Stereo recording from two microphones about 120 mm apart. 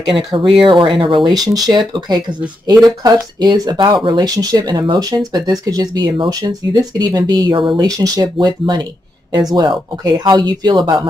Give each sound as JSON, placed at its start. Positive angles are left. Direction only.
{"t": 0.1, "sound": "speech", "side_deg": -35}
{"t": 2.8, "sound": "speech", "side_deg": -35}
{"t": 7.8, "sound": "speech", "side_deg": -30}